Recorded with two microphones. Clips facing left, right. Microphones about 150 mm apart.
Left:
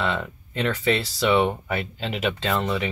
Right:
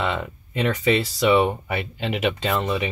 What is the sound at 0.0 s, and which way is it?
Speech, 15° right (ahead or behind).